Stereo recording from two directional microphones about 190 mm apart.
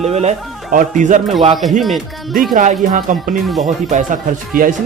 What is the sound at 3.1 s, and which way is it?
Speech, 40° right (ahead or behind).